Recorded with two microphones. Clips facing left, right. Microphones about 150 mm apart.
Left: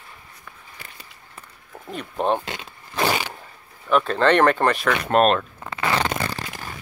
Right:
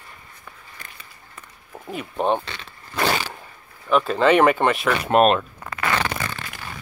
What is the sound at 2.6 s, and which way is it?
Zipper, 10° left (ahead or behind).